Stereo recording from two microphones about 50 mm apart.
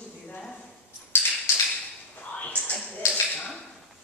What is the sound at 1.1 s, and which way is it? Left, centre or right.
Tap, left.